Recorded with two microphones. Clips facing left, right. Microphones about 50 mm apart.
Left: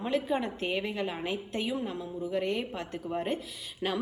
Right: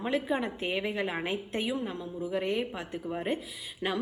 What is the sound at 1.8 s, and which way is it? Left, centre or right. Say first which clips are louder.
A woman's voice: even; centre.